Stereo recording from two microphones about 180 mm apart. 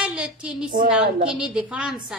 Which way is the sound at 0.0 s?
5° right (ahead or behind).